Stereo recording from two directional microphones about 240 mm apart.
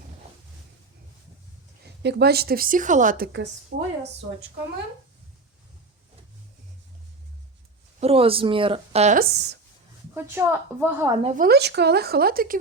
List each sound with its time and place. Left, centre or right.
2.0 s a woman's voice: right
3.7 s speech: right
8.0 s speech: right
10.2 s a woman's voice: centre
11.2 s speech: right
11.4 s a woman's voice: right